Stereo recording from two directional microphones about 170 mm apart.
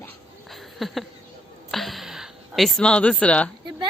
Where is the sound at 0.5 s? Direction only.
Centre (ahead or behind).